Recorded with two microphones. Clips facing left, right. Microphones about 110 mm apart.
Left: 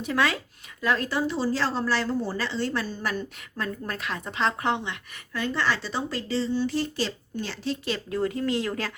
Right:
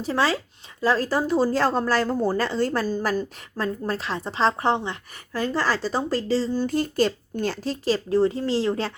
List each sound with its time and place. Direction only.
0.0 s speech: 30° right (ahead or behind)